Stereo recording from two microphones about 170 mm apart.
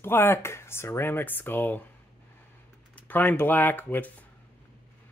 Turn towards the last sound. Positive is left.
turn(degrees=10)  # may be behind; listen again after turning